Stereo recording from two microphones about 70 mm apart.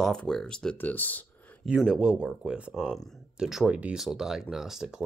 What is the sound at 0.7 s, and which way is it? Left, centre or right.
Speech, left.